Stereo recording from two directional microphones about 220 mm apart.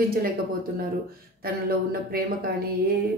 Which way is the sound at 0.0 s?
45° right (ahead or behind).